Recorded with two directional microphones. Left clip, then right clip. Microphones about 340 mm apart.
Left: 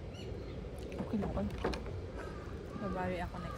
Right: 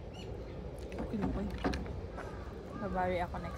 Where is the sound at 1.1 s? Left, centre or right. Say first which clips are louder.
Even; centre.